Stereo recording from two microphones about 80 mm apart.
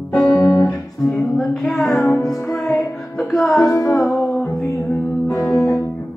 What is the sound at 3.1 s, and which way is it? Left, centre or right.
Music, centre.